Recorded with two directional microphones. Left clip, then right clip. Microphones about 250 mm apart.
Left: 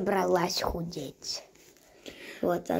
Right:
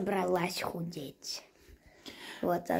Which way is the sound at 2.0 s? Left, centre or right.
Centre.